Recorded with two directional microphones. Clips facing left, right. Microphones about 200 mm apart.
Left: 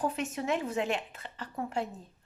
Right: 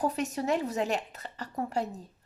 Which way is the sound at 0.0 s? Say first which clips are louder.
Right 2 dB; 40° right (ahead or behind).